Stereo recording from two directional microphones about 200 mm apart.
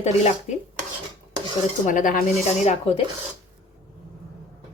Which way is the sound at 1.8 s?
40° left (ahead or behind).